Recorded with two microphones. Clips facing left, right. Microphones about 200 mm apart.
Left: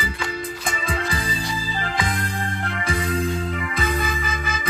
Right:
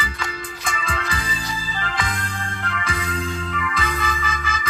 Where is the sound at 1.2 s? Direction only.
45° left (ahead or behind).